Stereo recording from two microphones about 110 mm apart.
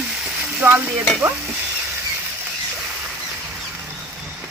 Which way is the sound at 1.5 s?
10° right (ahead or behind).